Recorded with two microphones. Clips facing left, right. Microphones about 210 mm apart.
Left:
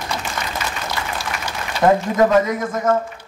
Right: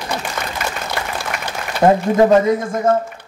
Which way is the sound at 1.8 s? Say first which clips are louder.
Right 2 dB; 30° right (ahead or behind).